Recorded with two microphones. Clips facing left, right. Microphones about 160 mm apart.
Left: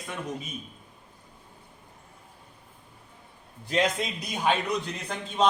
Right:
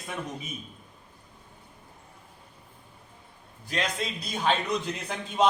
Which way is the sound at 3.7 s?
20° left (ahead or behind).